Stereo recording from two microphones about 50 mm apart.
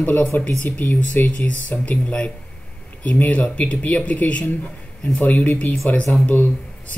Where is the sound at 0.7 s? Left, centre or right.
Left.